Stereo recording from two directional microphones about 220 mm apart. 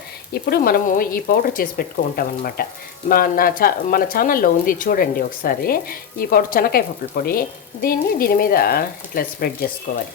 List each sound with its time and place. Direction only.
0.4 s speech: 40° left (ahead or behind)